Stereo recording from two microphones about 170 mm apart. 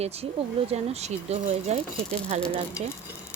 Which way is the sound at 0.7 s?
40° right (ahead or behind).